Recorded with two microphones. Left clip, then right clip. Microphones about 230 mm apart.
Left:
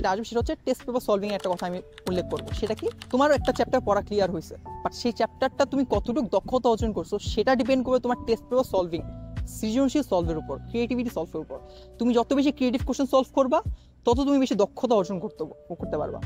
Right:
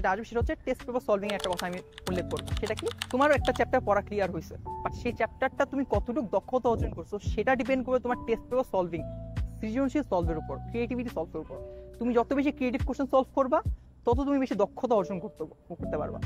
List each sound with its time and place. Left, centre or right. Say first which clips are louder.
0.0 s speech: left 3 dB; left
2.2 s speech: left 4 dB; centre
3.1 s speech: left 3 dB; left